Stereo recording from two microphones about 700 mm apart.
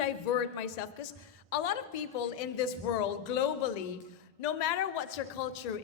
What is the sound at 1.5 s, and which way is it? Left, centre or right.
A woman's voice, left.